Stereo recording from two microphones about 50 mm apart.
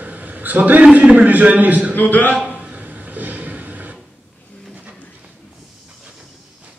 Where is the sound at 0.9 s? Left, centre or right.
Right.